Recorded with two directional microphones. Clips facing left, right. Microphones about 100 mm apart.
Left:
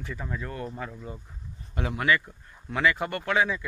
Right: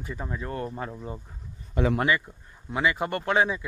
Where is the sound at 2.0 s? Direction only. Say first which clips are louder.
Even; 25° right (ahead or behind).